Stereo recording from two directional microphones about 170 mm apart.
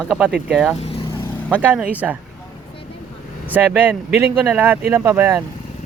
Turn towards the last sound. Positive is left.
turn(degrees=-15)  # may be behind; listen again after turning